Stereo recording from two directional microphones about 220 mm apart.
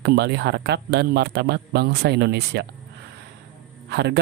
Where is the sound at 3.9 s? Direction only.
50° right (ahead or behind).